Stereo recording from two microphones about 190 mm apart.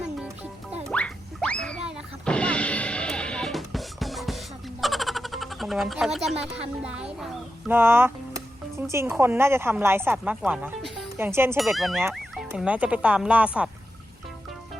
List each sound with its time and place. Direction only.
0.9 s music: 5° left (ahead or behind)
4.8 s a sound: centre (ahead or behind)
6.4 s a woman's voice: 5° right (ahead or behind)
11.5 s a woman's voice: centre (ahead or behind)